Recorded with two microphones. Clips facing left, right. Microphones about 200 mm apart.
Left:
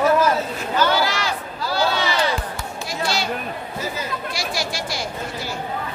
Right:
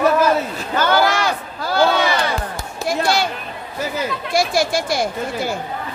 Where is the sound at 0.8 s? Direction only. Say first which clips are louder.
Right 4 dB; 55° right (ahead or behind).